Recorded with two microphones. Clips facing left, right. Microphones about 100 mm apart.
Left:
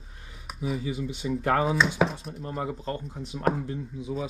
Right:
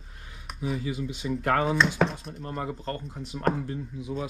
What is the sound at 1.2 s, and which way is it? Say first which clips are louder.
Speech: left 1 dB; 30° left (ahead or behind).